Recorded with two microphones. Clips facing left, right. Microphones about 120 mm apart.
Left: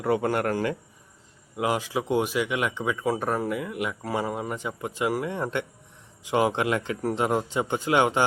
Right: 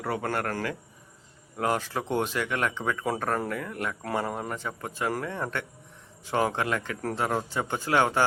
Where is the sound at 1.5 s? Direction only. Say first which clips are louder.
Left 2 dB; 10° left (ahead or behind).